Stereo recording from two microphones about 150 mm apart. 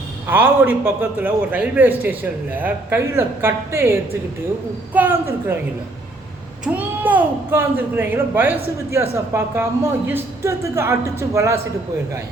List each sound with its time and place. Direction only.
0.3 s a man's voice: 15° right (ahead or behind)
6.7 s a man's voice: 10° right (ahead or behind)